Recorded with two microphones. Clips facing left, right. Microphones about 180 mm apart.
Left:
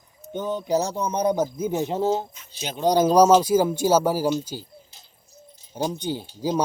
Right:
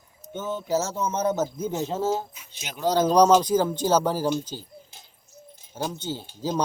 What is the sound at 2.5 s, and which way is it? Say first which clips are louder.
Speech: left 7 dB; 30° left (ahead or behind).